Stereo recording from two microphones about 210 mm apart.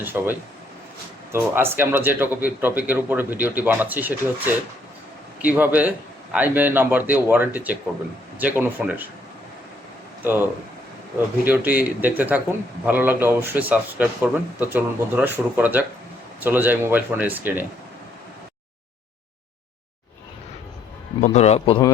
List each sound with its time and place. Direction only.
0.0 s a man's voice: 10° right (ahead or behind)
10.2 s a man's voice: 10° right (ahead or behind)
21.2 s a man's voice: 30° left (ahead or behind)